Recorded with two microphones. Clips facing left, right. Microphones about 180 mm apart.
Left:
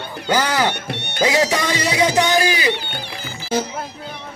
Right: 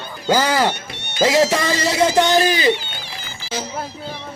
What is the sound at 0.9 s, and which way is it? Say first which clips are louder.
Music: right 1 dB; 60° left (ahead or behind).